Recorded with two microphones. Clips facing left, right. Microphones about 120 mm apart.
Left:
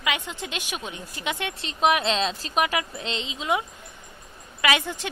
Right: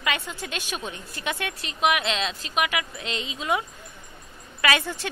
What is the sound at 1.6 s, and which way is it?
A woman's voice, 30° left (ahead or behind).